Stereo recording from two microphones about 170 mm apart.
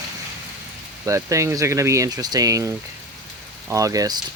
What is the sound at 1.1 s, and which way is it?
Speech, 20° right (ahead or behind).